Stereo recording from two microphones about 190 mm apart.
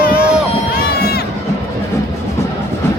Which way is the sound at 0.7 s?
55° left (ahead or behind).